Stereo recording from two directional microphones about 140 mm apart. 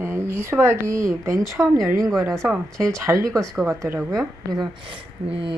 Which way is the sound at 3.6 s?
20° right (ahead or behind).